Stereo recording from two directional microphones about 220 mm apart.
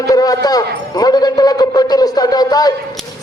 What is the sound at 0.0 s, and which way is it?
A man's voice, 15° left (ahead or behind).